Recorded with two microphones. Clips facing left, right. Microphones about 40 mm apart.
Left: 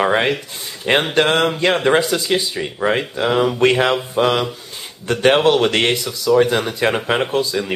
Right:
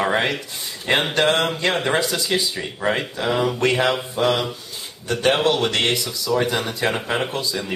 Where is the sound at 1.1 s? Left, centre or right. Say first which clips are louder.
Left 2 dB; left.